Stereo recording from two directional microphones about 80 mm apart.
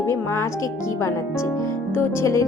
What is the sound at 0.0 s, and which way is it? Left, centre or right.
Speech, left.